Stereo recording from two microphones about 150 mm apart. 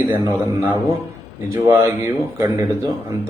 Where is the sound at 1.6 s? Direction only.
20° right (ahead or behind).